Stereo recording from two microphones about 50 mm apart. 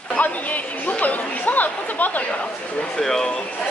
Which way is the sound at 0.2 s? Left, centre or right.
Left.